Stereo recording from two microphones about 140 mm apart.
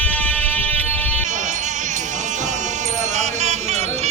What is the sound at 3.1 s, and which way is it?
Music, 55° right (ahead or behind).